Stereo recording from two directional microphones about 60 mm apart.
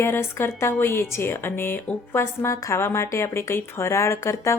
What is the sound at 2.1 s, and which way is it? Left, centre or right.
A woman's voice, left.